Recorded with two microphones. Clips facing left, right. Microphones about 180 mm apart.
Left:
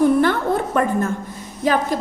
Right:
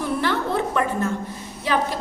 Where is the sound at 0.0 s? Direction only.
50° left (ahead or behind).